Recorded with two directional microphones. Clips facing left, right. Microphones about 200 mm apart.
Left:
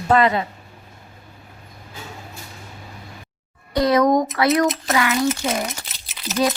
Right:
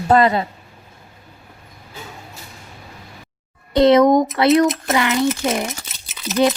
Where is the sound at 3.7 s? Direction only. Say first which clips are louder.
Right 5 dB; 25° right (ahead or behind).